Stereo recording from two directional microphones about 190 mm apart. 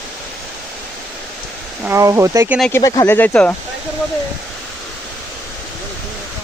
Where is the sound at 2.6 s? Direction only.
5° left (ahead or behind).